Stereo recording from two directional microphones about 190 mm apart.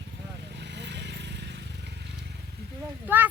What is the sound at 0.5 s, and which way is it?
Vehicle, 65° right (ahead or behind).